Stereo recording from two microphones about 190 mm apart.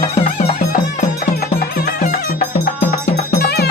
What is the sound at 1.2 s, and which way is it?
Music, 50° left (ahead or behind).